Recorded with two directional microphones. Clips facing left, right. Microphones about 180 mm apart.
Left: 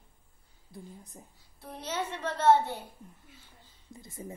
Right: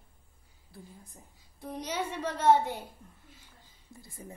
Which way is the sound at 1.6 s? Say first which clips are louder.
Right 1 dB; 10° right (ahead or behind).